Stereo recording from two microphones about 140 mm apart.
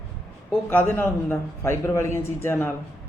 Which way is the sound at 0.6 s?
15° left (ahead or behind).